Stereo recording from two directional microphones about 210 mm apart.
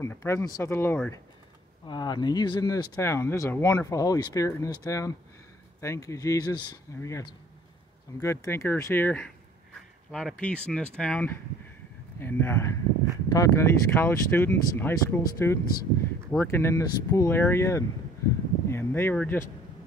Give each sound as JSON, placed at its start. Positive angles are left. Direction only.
{"t": 0.0, "sound": "speech", "side_deg": 10}
{"t": 1.9, "sound": "speech", "side_deg": 20}